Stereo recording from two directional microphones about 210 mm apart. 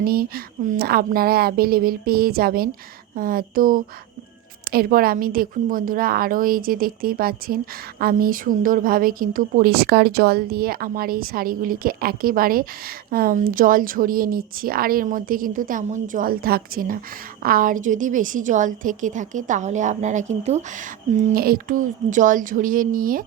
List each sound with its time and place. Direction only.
0.0 s a woman's voice: 45° right (ahead or behind)
21.2 s a woman's voice: 45° right (ahead or behind)